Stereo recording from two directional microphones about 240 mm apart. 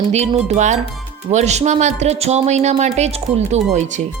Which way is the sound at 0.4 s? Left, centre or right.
Right.